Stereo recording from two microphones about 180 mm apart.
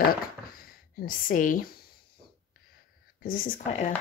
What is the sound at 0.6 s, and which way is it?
Writing, 55° left (ahead or behind).